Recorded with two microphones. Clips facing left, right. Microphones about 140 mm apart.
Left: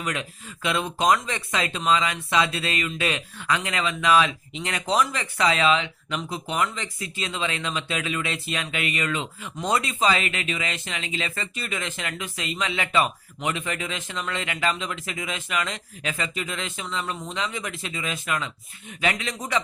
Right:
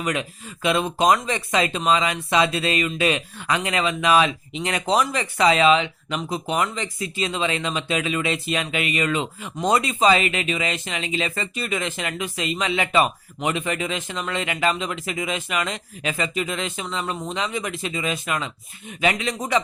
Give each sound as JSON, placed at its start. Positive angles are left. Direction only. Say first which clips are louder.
{"t": 0.0, "sound": "speech", "louder": "right 4 dB", "side_deg": -15}